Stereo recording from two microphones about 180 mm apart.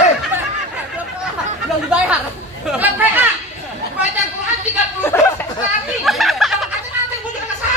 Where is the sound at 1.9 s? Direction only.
5° right (ahead or behind).